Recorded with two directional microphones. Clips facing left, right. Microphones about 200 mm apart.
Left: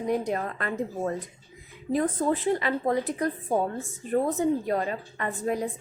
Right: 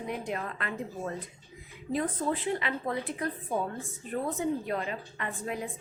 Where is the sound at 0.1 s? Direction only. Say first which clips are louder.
Left 8 dB; 40° left (ahead or behind).